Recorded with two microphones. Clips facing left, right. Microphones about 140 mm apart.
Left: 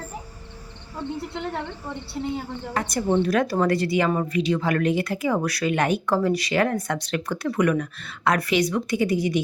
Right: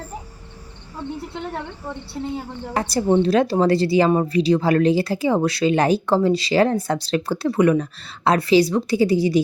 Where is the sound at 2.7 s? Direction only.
30° right (ahead or behind).